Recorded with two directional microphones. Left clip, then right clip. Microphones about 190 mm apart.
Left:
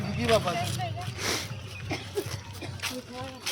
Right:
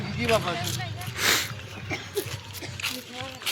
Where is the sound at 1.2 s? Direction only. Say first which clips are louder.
Right 8 dB; centre (ahead or behind).